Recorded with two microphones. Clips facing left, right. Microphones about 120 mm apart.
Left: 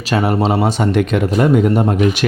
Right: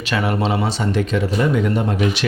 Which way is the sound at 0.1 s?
40° left (ahead or behind).